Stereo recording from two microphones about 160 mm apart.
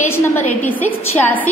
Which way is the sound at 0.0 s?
15° left (ahead or behind).